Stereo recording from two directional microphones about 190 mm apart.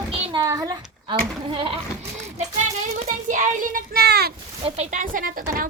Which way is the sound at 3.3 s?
45° right (ahead or behind).